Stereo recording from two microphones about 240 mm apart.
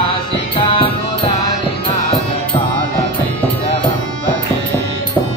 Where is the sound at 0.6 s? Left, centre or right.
Left.